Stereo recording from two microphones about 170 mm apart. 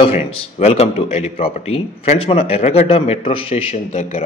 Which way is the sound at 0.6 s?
40° left (ahead or behind).